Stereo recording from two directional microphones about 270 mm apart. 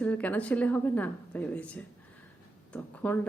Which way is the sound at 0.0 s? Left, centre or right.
Centre.